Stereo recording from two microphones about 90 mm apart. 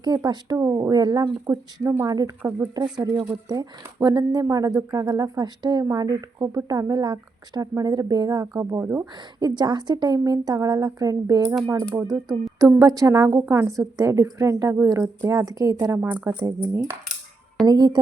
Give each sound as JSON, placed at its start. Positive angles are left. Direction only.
{"t": 0.0, "sound": "a woman's voice", "side_deg": -50}
{"t": 1.8, "sound": "speech", "side_deg": -30}
{"t": 2.0, "sound": "a woman's voice", "side_deg": -45}
{"t": 2.4, "sound": "speech", "side_deg": -20}
{"t": 3.0, "sound": "a woman's voice", "side_deg": -50}
{"t": 8.8, "sound": "speech", "side_deg": -25}
{"t": 9.4, "sound": "a woman's voice", "side_deg": -50}
{"t": 12.1, "sound": "speech", "side_deg": 0}
{"t": 12.5, "sound": "speech", "side_deg": -40}
{"t": 16.0, "sound": "a woman's voice", "side_deg": -15}
{"t": 17.7, "sound": "a woman's voice", "side_deg": -50}